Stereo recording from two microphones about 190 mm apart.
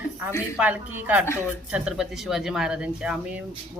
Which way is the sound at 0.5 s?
10° right (ahead or behind).